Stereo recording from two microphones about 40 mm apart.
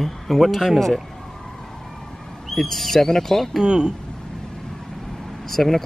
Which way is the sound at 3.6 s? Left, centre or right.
Right.